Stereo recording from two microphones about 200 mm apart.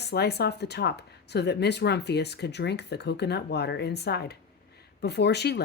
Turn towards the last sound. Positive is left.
turn(degrees=55)  # may be behind; listen again after turning